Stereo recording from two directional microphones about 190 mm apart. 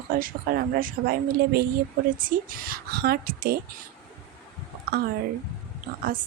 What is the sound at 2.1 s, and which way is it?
Speech, 45° right (ahead or behind).